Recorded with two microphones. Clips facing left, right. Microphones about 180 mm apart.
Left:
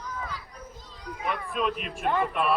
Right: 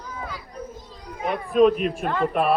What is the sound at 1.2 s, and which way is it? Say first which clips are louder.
Speech: right 11 dB; 40° right (ahead or behind).